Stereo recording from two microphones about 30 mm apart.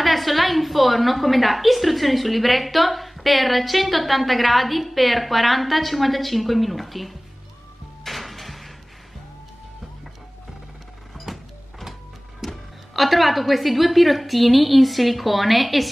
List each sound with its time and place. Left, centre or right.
0.0 s a woman's voice: centre
8.0 s music: centre
11.3 s vehicle: centre
12.4 s music: centre
12.9 s a woman's voice: centre